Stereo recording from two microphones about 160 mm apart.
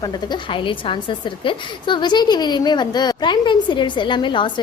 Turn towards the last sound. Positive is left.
turn(degrees=30)  # may be behind; listen again after turning